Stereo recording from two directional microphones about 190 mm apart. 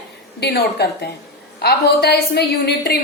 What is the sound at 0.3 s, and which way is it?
A woman's voice, 60° left (ahead or behind).